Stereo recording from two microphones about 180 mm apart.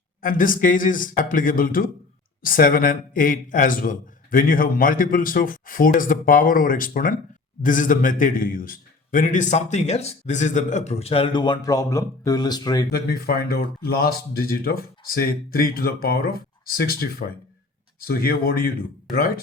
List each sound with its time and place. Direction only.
0.2 s a man's voice: 50° left (ahead or behind); by 12.9 s 20° left (ahead or behind)
12.9 s speech: 60° left (ahead or behind)